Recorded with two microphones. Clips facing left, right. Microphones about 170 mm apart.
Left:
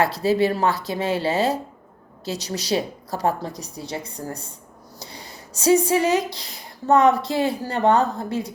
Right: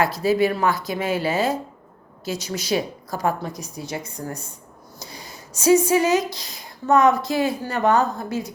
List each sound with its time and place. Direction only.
0.0 s a woman's voice: 30° left (ahead or behind)